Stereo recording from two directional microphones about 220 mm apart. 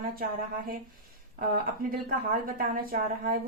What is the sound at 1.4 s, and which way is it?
Speech, 40° right (ahead or behind).